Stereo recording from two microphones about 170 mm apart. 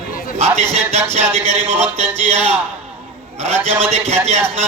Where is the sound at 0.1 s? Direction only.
55° left (ahead or behind).